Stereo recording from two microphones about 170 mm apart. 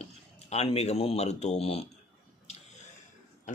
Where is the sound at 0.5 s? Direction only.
40° left (ahead or behind).